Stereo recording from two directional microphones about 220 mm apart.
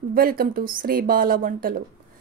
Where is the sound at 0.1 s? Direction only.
40° right (ahead or behind).